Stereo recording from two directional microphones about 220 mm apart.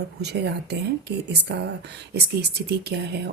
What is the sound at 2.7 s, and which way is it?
Speech, 45° right (ahead or behind).